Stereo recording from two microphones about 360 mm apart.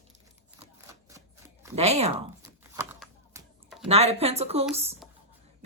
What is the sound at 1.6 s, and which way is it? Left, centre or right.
Shuffling cards, centre.